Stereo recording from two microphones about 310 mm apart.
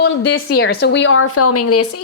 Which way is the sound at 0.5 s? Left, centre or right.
Left.